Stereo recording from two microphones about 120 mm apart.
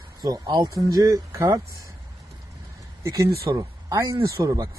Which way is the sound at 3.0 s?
25° right (ahead or behind).